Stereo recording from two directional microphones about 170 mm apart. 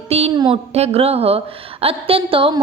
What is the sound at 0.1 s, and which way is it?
A woman's voice, 35° right (ahead or behind).